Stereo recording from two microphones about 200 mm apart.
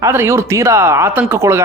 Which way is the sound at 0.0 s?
15° right (ahead or behind).